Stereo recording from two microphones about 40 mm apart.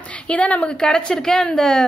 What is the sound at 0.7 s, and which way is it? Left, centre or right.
A woman's voice, centre.